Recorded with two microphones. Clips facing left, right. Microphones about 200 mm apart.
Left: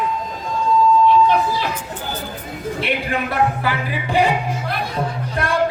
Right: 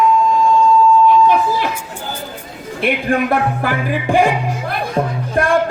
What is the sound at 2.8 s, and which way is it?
A man's voice, 50° right (ahead or behind).